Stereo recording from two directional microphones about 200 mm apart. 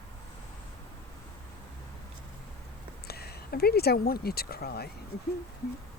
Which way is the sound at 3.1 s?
50° left (ahead or behind).